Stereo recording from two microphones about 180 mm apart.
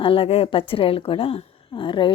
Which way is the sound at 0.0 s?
30° left (ahead or behind).